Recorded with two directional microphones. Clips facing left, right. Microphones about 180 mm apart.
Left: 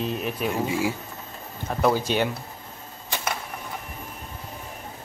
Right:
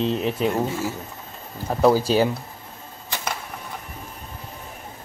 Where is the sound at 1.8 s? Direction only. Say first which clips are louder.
Right 5 dB; 30° right (ahead or behind).